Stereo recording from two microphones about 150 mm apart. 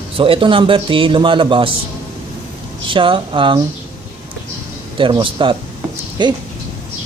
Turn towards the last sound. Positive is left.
turn(degrees=-30)  # may be behind; listen again after turning